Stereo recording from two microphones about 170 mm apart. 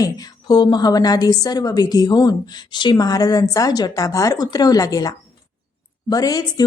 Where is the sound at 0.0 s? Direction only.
20° left (ahead or behind).